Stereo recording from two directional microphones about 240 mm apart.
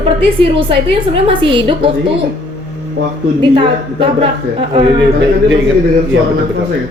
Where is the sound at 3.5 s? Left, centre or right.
Right.